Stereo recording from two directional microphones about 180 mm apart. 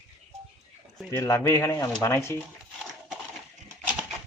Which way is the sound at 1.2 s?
15° left (ahead or behind).